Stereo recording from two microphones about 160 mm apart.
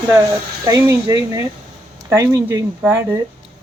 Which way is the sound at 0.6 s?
20° right (ahead or behind).